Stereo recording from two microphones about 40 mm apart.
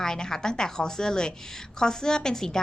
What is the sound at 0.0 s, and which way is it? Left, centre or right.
A woman's voice, centre.